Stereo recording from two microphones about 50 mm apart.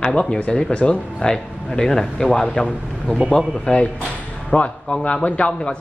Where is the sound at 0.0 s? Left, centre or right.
Centre.